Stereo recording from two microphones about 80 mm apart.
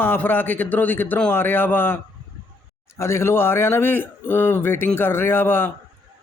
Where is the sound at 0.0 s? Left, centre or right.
Left.